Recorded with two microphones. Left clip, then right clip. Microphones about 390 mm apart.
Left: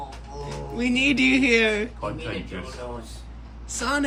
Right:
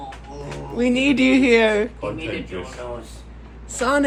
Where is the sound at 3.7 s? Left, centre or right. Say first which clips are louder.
Right 6 dB; centre.